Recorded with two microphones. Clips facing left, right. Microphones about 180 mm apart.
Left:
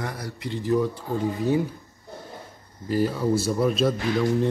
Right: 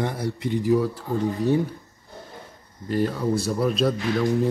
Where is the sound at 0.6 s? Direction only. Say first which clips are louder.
Even; 5° right (ahead or behind).